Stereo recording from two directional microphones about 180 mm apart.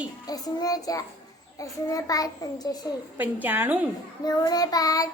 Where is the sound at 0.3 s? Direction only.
20° left (ahead or behind).